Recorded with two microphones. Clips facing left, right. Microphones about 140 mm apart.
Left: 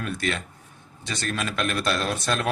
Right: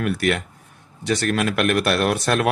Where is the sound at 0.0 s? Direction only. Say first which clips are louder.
Right 7 dB; 70° right (ahead or behind).